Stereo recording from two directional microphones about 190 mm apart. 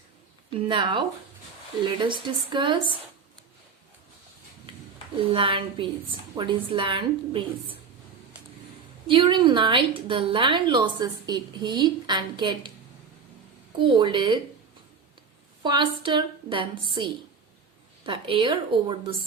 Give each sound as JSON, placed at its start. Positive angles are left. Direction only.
{"t": 0.7, "sound": "a woman's voice", "side_deg": -25}
{"t": 5.2, "sound": "a woman's voice", "side_deg": -25}
{"t": 9.0, "sound": "a woman's voice", "side_deg": -25}
{"t": 13.7, "sound": "a woman's voice", "side_deg": -25}
{"t": 15.6, "sound": "a woman's voice", "side_deg": -25}